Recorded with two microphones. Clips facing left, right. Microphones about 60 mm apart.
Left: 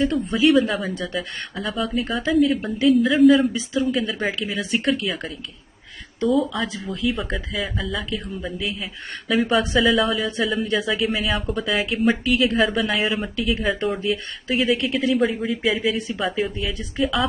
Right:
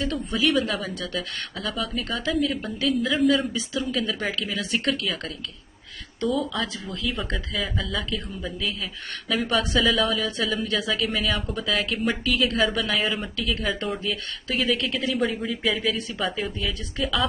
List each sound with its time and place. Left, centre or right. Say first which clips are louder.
0.0 s a woman's voice: left 6 dB; left
0.5 s speech: left 7 dB; centre
0.9 s speech: left 3 dB; centre
1.6 s speech: left 5 dB; centre
3.5 s speech: left 5 dB; centre
5.0 s speech: left 3 dB; centre
8.5 s a woman's voice: left 2 dB; left
9.3 s speech: left 4 dB; centre
12.6 s speech: left 3 dB; centre